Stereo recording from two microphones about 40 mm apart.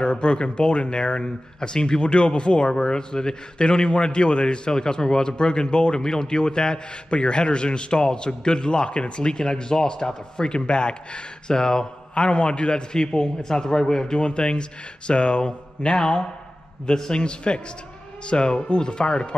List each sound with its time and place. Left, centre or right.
0.0 s speech: left